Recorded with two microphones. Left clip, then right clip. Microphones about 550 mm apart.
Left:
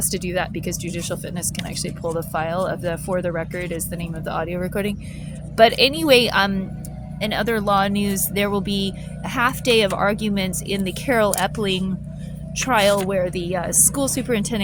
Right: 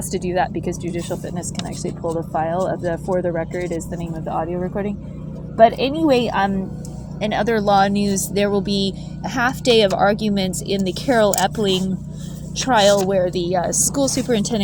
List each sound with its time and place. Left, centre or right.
0.1 s a woman's voice: left